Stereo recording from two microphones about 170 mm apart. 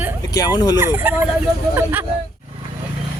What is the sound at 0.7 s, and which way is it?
Speech, 10° right (ahead or behind).